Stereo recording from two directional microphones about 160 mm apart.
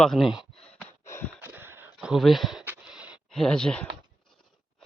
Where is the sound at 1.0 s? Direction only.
15° left (ahead or behind).